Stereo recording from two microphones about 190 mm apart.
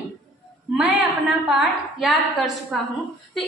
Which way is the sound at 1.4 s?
Centre (ahead or behind).